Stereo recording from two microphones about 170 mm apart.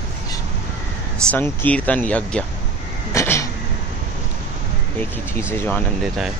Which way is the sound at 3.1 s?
15° left (ahead or behind).